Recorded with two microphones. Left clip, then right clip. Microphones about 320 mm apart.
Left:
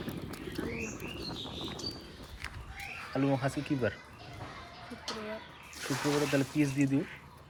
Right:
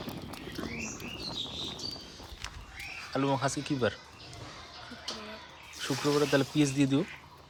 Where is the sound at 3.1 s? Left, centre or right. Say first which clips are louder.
Right 2 dB; centre.